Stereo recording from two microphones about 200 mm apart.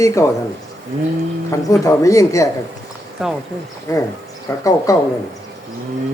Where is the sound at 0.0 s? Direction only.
15° left (ahead or behind).